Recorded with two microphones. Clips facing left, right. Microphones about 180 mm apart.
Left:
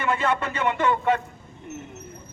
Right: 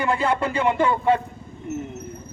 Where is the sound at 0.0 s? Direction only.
35° right (ahead or behind).